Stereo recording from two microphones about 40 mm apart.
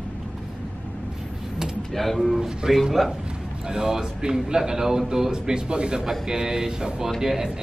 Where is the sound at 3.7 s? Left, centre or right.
Centre.